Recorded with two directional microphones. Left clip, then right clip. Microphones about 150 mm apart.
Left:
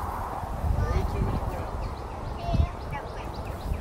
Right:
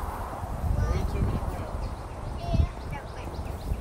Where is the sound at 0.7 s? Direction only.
35° right (ahead or behind).